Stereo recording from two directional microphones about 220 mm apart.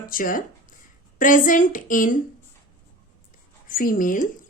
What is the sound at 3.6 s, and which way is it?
Speech, 40° left (ahead or behind).